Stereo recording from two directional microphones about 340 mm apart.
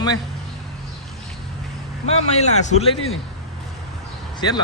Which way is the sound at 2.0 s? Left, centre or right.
Centre.